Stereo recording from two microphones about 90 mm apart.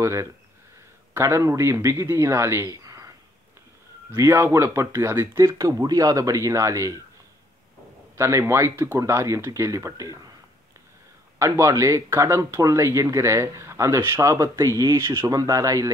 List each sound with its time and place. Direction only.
0.0 s a man's voice: 35° right (ahead or behind)
8.2 s speech: 30° right (ahead or behind)
11.3 s speech: 35° right (ahead or behind)